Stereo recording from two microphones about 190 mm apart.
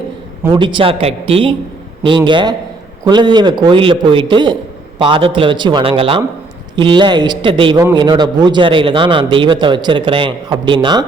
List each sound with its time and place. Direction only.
0.5 s a man's voice: 25° right (ahead or behind)